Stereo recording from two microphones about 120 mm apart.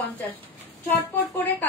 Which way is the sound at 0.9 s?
15° left (ahead or behind).